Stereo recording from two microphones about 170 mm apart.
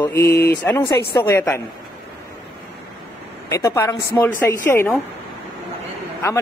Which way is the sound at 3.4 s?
15° left (ahead or behind).